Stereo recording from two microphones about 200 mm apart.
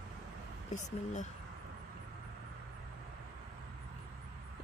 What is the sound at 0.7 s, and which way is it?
Speech, 35° left (ahead or behind).